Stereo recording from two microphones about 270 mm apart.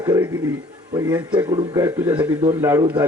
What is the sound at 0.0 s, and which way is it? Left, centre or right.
A man's voice, centre.